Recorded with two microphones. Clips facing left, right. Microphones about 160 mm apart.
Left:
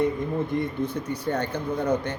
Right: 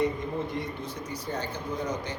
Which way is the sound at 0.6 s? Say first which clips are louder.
Left 8 dB; 60° left (ahead or behind).